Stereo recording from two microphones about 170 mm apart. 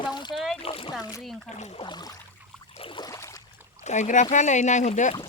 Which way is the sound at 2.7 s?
30° left (ahead or behind).